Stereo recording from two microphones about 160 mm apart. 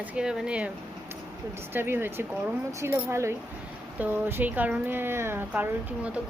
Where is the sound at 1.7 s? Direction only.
15° right (ahead or behind).